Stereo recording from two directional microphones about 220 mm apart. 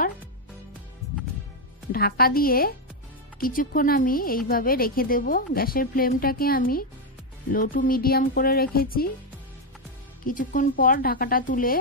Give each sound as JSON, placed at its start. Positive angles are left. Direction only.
{"t": 1.9, "sound": "a woman's voice", "side_deg": 45}
{"t": 10.2, "sound": "a woman's voice", "side_deg": 40}